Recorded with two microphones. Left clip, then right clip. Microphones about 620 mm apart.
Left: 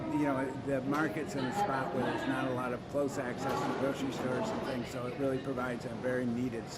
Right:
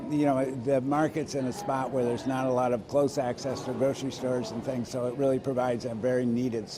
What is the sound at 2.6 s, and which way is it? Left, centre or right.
Speech, right.